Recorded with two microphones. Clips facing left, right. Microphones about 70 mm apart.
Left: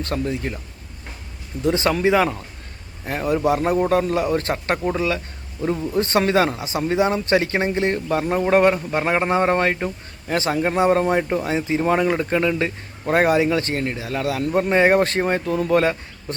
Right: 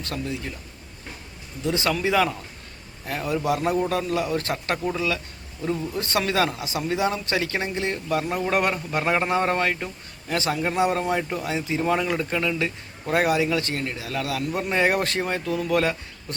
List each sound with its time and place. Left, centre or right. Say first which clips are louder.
0.0 s a man's voice: left 6 dB; left
1.6 s a man's voice: left 5 dB; left